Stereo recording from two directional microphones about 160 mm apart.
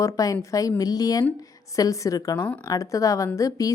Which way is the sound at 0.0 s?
20° left (ahead or behind).